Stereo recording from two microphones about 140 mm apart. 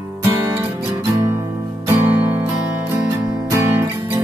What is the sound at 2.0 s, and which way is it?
Music, 15° right (ahead or behind).